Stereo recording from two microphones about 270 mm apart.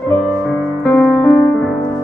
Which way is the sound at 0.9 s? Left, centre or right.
Centre.